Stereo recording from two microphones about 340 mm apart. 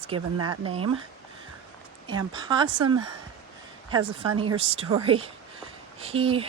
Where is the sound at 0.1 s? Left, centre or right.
Centre.